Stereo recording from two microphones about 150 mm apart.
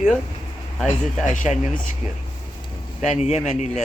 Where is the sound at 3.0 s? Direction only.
50° left (ahead or behind).